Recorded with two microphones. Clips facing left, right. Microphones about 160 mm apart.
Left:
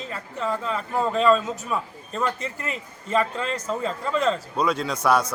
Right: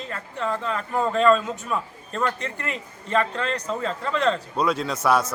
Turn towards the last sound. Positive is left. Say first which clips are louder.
# even
turn(degrees=-5)  # may be behind; listen again after turning